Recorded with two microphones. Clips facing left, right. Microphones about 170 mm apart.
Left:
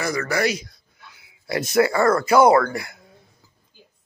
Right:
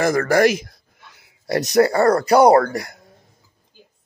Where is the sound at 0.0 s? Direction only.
50° right (ahead or behind).